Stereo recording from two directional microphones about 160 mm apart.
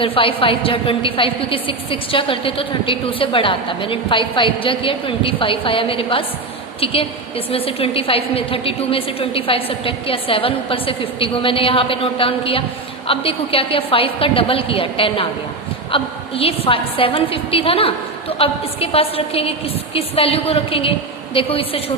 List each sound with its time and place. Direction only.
0.0 s a woman's voice: 35° left (ahead or behind)